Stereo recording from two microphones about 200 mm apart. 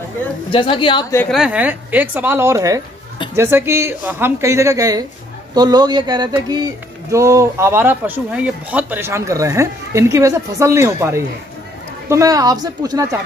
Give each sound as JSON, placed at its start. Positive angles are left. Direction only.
{"t": 0.5, "sound": "a woman's voice", "side_deg": 25}
{"t": 1.3, "sound": "a man's voice", "side_deg": -5}